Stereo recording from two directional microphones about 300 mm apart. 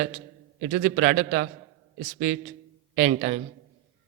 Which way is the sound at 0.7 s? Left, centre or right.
Right.